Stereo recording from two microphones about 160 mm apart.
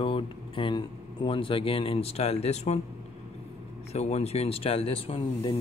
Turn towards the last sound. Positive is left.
turn(degrees=35)  # may be behind; listen again after turning